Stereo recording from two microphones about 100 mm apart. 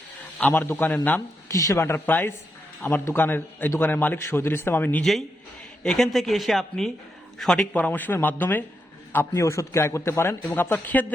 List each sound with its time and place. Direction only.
0.3 s a man's voice: 15° left (ahead or behind)
1.5 s a man's voice: 30° left (ahead or behind)
5.8 s a man's voice: 5° left (ahead or behind)